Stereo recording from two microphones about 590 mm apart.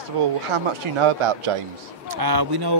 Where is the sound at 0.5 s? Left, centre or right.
Right.